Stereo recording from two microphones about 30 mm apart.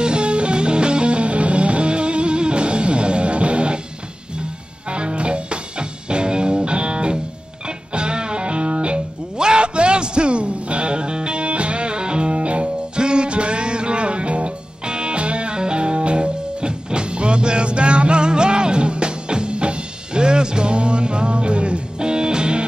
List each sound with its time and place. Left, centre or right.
0.0 s music: right
4.9 s music: right
11.4 s music: right
12.9 s music: right